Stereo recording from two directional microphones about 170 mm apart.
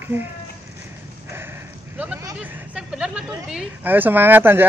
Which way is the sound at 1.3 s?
15° right (ahead or behind).